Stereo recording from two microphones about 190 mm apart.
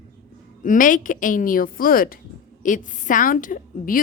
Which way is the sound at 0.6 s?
45° left (ahead or behind).